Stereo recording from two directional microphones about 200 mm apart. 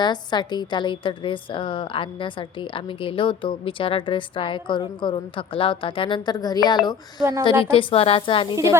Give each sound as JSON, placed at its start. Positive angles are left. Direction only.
{"t": 0.0, "sound": "a woman's voice", "side_deg": 20}